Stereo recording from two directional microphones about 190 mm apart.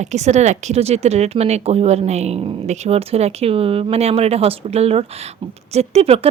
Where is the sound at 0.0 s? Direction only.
35° right (ahead or behind).